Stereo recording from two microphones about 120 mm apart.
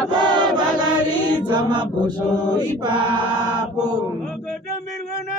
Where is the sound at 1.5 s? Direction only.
40° right (ahead or behind).